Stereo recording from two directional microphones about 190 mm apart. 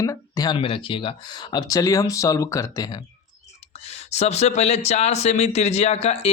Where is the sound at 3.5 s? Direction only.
35° left (ahead or behind).